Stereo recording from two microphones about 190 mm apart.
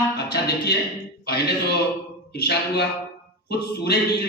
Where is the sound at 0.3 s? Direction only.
60° left (ahead or behind).